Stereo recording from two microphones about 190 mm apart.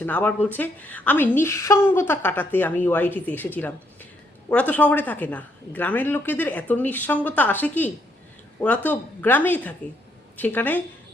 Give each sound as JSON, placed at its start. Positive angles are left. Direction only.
{"t": 0.0, "sound": "a woman's voice", "side_deg": 10}